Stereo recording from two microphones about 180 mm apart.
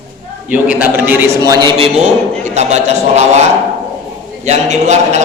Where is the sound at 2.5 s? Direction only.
40° right (ahead or behind).